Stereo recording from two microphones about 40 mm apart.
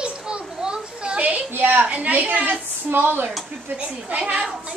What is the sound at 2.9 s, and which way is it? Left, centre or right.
Speech, right.